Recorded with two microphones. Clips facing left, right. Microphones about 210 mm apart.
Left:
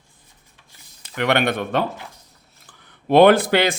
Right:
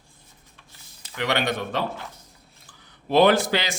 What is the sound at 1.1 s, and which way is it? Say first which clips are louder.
Speech: left 5 dB; 60° left (ahead or behind).